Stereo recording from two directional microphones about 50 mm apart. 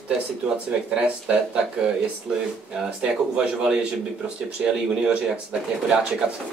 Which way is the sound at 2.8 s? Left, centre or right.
Centre.